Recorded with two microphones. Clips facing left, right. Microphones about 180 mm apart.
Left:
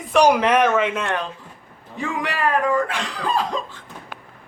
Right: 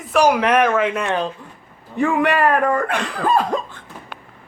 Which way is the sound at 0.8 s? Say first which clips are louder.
Right 2 dB; centre (ahead or behind).